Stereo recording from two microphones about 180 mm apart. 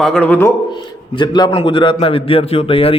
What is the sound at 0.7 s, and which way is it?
A man's voice, 25° left (ahead or behind).